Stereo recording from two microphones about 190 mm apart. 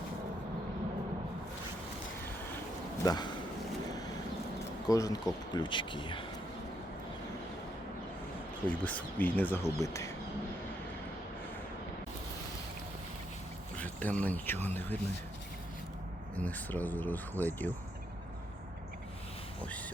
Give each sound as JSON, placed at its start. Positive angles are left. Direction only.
{"t": 3.0, "sound": "speech", "side_deg": 20}
{"t": 4.9, "sound": "speech", "side_deg": 20}
{"t": 8.6, "sound": "speech", "side_deg": 10}
{"t": 13.7, "sound": "speech", "side_deg": 10}
{"t": 16.3, "sound": "speech", "side_deg": 10}